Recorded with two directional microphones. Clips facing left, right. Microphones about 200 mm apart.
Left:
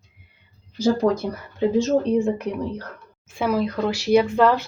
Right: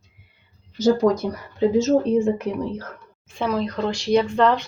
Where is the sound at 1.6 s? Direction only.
Centre (ahead or behind).